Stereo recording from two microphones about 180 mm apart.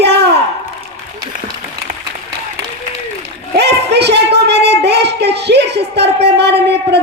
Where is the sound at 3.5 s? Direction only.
65° right (ahead or behind).